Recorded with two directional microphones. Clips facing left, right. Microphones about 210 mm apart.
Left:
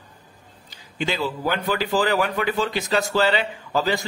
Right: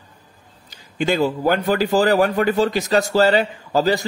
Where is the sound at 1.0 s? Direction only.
45° right (ahead or behind).